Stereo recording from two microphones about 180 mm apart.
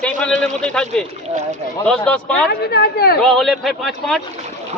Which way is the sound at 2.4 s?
60° left (ahead or behind).